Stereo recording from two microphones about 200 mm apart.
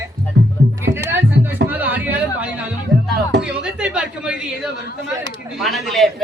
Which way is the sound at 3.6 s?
5° right (ahead or behind).